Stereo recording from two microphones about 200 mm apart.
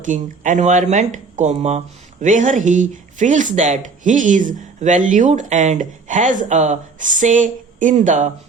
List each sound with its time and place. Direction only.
0.0 s speech: 40° right (ahead or behind)